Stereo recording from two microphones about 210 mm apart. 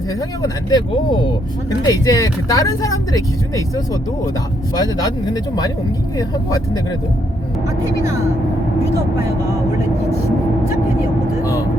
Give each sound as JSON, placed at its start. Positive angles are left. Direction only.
{"t": 0.4, "sound": "speech", "side_deg": 20}